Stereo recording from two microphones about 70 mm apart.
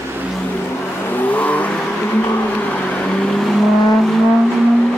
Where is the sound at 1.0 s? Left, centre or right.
Left; by 4.1 s centre.